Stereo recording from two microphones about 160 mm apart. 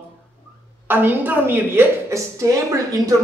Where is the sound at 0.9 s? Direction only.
10° right (ahead or behind).